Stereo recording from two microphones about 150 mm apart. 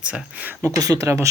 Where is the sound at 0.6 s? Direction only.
25° right (ahead or behind).